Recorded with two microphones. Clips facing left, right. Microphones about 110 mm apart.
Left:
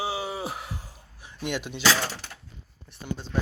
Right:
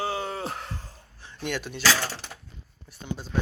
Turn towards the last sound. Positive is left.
turn(degrees=-5)  # may be behind; listen again after turning